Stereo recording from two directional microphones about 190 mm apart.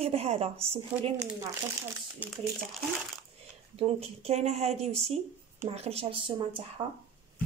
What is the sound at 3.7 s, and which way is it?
Speech, 30° right (ahead or behind).